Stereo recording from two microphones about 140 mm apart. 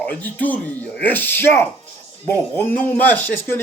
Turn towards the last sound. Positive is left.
turn(degrees=15)  # may be behind; listen again after turning